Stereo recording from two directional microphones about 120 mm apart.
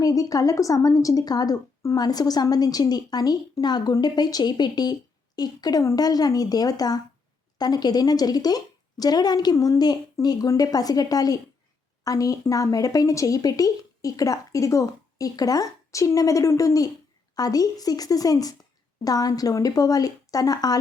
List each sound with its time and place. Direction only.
0.0 s a woman's voice: 30° left (ahead or behind)